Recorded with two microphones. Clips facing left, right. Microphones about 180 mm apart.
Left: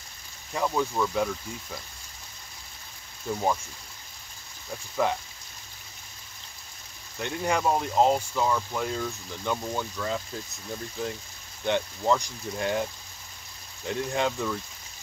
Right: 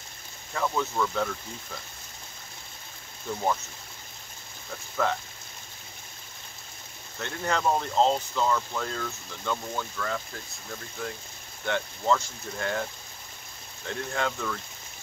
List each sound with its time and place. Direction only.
0.6 s speech: 15° left (ahead or behind)
5.0 s speech: 15° left (ahead or behind)
7.2 s speech: 15° left (ahead or behind)
13.8 s speech: 20° left (ahead or behind)